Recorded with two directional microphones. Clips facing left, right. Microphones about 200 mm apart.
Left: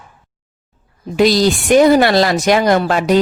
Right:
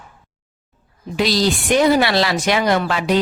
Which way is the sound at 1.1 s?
50° left (ahead or behind).